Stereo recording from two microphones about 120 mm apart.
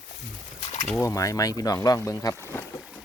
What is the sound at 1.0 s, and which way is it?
Speech, 25° left (ahead or behind).